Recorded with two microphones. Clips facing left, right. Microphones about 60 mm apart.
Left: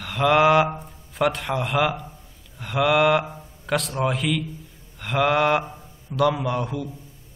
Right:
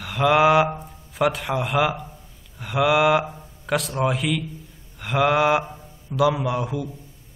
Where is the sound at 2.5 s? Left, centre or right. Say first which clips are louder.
Right 1 dB; centre.